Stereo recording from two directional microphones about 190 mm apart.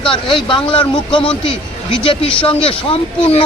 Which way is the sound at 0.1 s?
25° left (ahead or behind).